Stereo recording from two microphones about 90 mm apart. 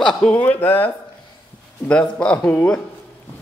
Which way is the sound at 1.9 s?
10° left (ahead or behind).